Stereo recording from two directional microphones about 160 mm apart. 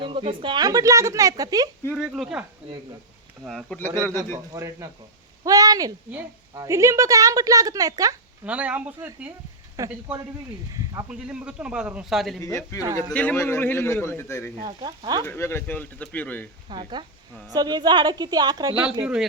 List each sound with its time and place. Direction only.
0.0 s a woman's voice: 30° right (ahead or behind)
1.9 s speech: 5° right (ahead or behind)
3.4 s a man's voice: centre (ahead or behind)
4.5 s a woman's voice: 20° right (ahead or behind)
8.4 s a man's voice: 10° right (ahead or behind)
11.1 s a man's voice: 5° right (ahead or behind)
12.4 s a man's voice: 20° left (ahead or behind)
14.6 s a woman's voice: 30° right (ahead or behind)
15.2 s a man's voice: 15° left (ahead or behind)
16.6 s a woman's voice: 30° right (ahead or behind)
19.0 s speech: 5° right (ahead or behind)